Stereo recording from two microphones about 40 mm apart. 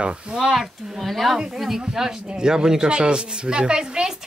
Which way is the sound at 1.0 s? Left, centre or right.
Centre.